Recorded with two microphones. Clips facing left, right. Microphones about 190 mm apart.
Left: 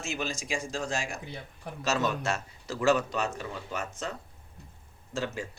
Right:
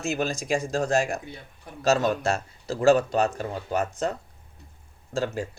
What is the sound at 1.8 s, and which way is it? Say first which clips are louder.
Speech: right 7 dB; 35° right (ahead or behind).